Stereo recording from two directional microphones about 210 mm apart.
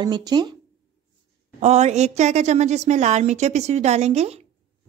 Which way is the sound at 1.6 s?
30° right (ahead or behind).